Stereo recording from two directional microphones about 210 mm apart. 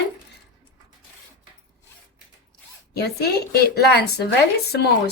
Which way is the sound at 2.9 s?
50° left (ahead or behind).